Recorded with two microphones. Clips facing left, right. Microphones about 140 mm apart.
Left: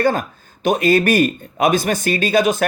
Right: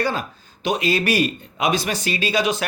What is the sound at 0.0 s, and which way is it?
Speech, 50° left (ahead or behind).